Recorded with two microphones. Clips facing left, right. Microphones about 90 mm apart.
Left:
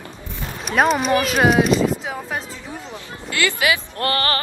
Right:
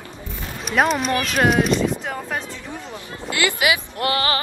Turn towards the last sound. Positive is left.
turn(degrees=-15)  # may be behind; listen again after turning